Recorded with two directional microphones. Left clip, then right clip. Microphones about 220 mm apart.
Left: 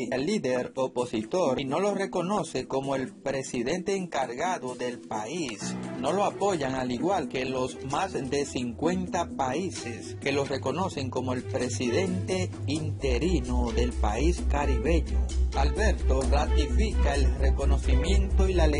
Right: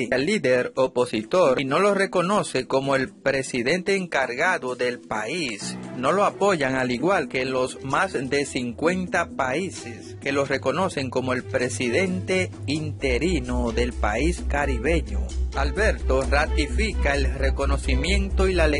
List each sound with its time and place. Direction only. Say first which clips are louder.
0.0 s speech: right 6 dB; 35° right (ahead or behind)